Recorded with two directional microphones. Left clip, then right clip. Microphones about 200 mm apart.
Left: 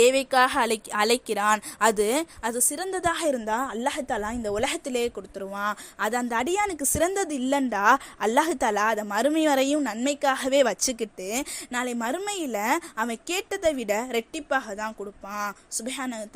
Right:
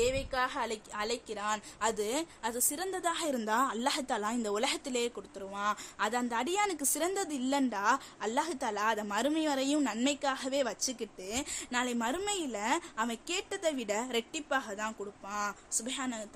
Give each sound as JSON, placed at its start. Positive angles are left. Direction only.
{"t": 0.0, "sound": "a woman's voice", "side_deg": 40}
{"t": 3.4, "sound": "a woman's voice", "side_deg": 15}